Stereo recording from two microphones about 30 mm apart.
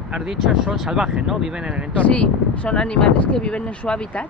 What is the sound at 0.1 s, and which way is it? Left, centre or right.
Speech, centre.